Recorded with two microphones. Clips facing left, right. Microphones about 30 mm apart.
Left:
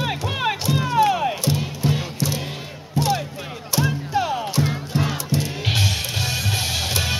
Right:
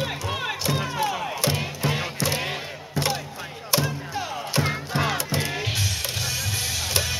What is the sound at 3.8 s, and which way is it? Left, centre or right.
Music, left.